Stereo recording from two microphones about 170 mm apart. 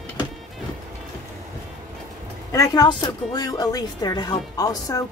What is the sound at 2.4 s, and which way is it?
Speech, 20° left (ahead or behind).